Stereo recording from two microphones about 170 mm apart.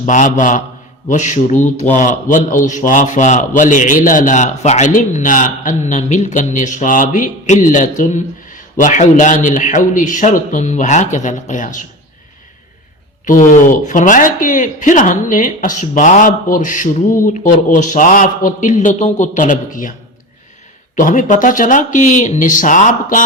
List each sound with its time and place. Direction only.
0.0 s a man's voice: 50° left (ahead or behind)
13.2 s a man's voice: 50° left (ahead or behind)
20.9 s a man's voice: 50° left (ahead or behind)